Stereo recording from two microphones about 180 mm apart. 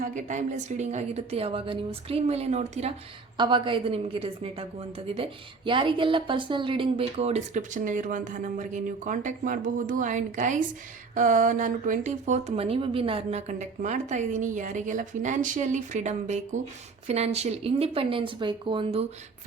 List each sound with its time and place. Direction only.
0.0 s speech: 45° right (ahead or behind)
3.3 s a woman's voice: 25° right (ahead or behind)